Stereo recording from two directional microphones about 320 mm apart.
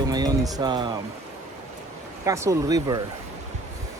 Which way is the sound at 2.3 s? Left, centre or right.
Centre.